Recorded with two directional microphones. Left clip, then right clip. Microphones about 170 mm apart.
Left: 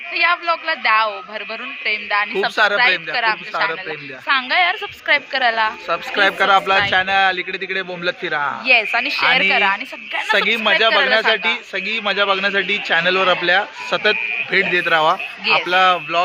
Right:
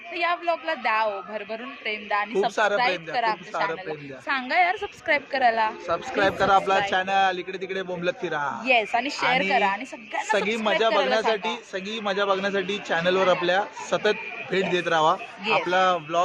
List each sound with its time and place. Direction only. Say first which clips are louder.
0.1 s a woman's voice: left 8 dB; 10° right (ahead or behind)
5.9 s a man's voice: left 8 dB; 15° left (ahead or behind)
8.6 s a woman's voice: left 7 dB; 10° right (ahead or behind)
10.3 s a man's voice: left 8 dB; 10° left (ahead or behind)
15.4 s speech: left 7 dB; 45° left (ahead or behind)
15.7 s a man's voice: left 7 dB; 10° left (ahead or behind)